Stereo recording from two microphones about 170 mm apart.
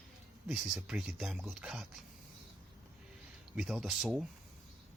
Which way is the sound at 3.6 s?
Centre (ahead or behind).